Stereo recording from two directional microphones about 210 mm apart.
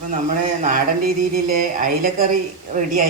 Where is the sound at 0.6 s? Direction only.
40° right (ahead or behind).